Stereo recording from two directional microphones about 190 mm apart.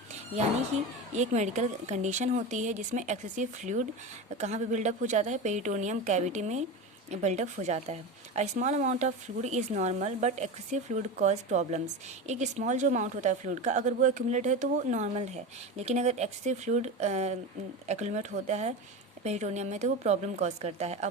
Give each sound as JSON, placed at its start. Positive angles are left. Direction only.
{"t": 1.1, "sound": "a woman's voice", "side_deg": -40}